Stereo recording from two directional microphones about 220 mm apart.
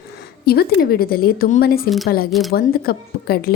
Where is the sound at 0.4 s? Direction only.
45° left (ahead or behind).